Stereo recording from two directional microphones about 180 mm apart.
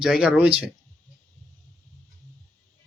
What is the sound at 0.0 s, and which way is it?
Speech, 5° right (ahead or behind).